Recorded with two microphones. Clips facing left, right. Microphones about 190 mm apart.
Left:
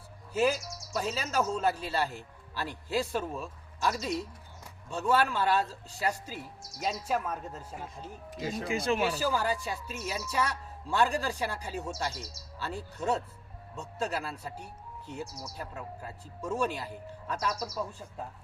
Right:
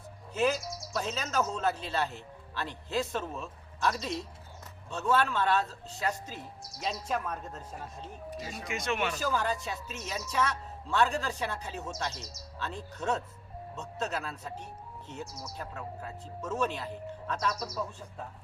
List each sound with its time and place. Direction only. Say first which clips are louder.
0.9 s speech: left 1 dB; 10° left (ahead or behind)
8.6 s speech: left 3 dB; 30° left (ahead or behind)
9.1 s speech: left 1 dB; 10° left (ahead or behind)